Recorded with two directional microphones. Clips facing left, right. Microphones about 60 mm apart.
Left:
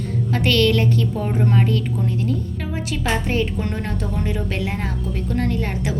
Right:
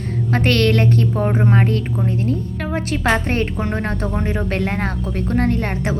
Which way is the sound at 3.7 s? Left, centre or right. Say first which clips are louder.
Right 4 dB; right.